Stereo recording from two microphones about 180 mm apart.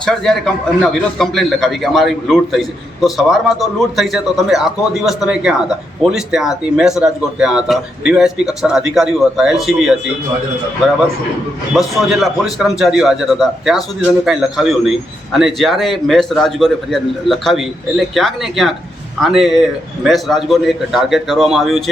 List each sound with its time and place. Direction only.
0.0 s a man's voice: 5° left (ahead or behind)
11.7 s a man's voice: centre (ahead or behind)